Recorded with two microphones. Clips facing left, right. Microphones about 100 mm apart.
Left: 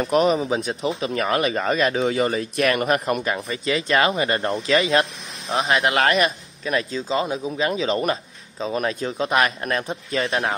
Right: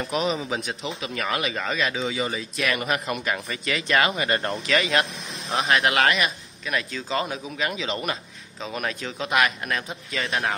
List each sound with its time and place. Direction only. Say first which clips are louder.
0.0 s a man's voice: left 7 dB; 45° left (ahead or behind)
2.0 s speech: left 6 dB; 55° left (ahead or behind)
3.3 s speech: left 4 dB; 30° left (ahead or behind)
6.9 s a man's voice: left 4 dB; 20° left (ahead or behind)